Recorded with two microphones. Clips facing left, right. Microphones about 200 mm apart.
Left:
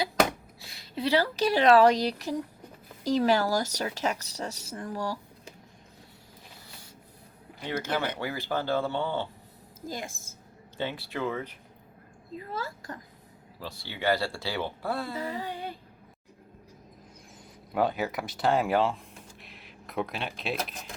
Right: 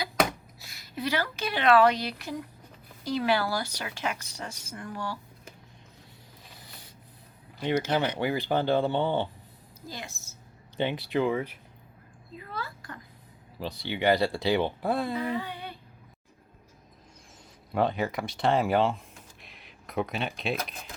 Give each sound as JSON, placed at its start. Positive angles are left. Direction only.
{"t": 0.0, "sound": "a sound", "side_deg": 30}
{"t": 3.0, "sound": "speech", "side_deg": 40}
{"t": 8.2, "sound": "speech", "side_deg": -20}
{"t": 9.8, "sound": "a woman's voice", "side_deg": 50}
{"t": 10.8, "sound": "speech", "side_deg": -20}
{"t": 12.4, "sound": "speech", "side_deg": 40}
{"t": 13.6, "sound": "speech", "side_deg": -20}
{"t": 15.4, "sound": "music", "side_deg": 40}
{"t": 17.7, "sound": "speech", "side_deg": 5}
{"t": 19.4, "sound": "a sound", "side_deg": 0}